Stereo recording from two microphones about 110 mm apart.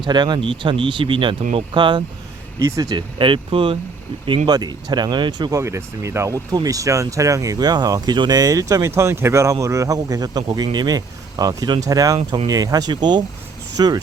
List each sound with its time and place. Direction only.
0.0 s speech: 40° right (ahead or behind)
2.6 s speech: 30° right (ahead or behind)
2.9 s speech: 50° right (ahead or behind)
4.4 s speech: 40° right (ahead or behind)
5.5 s speech: 25° right (ahead or behind)